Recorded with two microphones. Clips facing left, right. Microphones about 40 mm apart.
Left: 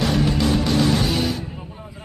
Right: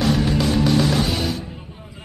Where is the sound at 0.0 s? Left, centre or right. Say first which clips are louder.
Right 1 dB; centre.